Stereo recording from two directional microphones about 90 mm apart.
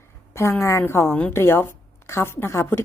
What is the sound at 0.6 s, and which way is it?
A woman's voice, 30° left (ahead or behind).